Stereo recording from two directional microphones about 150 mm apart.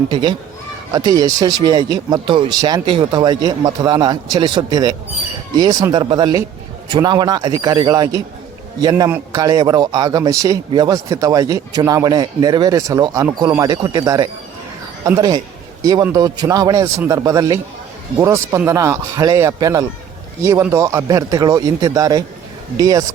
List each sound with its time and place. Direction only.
0.1 s a man's voice: 30° right (ahead or behind)